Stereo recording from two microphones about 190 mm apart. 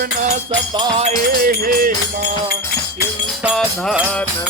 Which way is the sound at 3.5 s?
Centre (ahead or behind).